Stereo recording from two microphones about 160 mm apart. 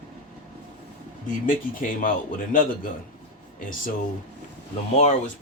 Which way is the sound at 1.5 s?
60° left (ahead or behind).